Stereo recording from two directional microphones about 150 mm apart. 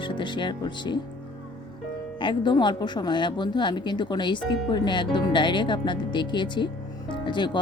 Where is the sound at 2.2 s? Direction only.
30° left (ahead or behind).